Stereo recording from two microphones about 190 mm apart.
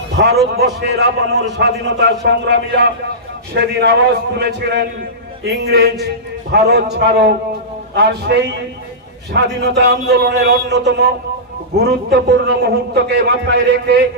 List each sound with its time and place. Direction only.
0.2 s a man's voice: 65° right (ahead or behind)
7.9 s a man's voice: 65° right (ahead or behind)